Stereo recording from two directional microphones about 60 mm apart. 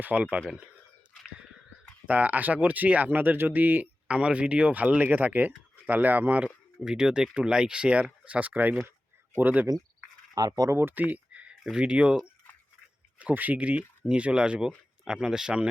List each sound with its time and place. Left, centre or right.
0.0 s speech: right
2.0 s speech: right
4.1 s speech: centre
6.7 s speech: centre; by 9.6 s right
10.3 s speech: right
10.7 s speech: right
10.9 s a sound: right
11.6 s speech: centre
13.1 s speech: right